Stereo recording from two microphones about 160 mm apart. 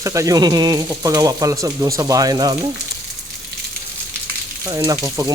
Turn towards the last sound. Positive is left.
turn(degrees=-20)  # may be behind; listen again after turning